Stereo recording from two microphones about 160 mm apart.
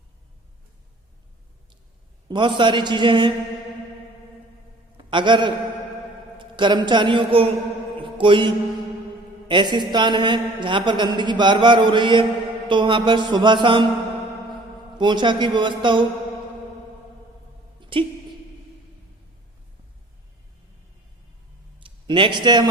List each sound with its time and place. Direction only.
2.3 s a man's voice: 30° right (ahead or behind)
5.1 s a man's voice: 30° right (ahead or behind)
8.0 s mantra: 30° right (ahead or behind)
9.5 s a man's voice: 30° right (ahead or behind)
14.9 s a man's voice: 30° right (ahead or behind)
17.7 s a sound: 30° right (ahead or behind)
21.8 s speech: 30° right (ahead or behind)